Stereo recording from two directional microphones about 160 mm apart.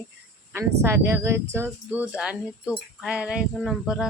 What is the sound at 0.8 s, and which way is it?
Speech, 15° right (ahead or behind).